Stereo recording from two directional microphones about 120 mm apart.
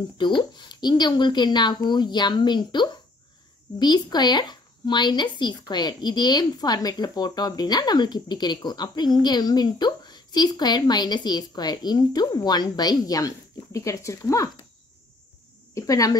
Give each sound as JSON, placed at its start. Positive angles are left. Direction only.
{"t": 0.2, "sound": "speech", "side_deg": 40}
{"t": 15.7, "sound": "a woman's voice", "side_deg": 30}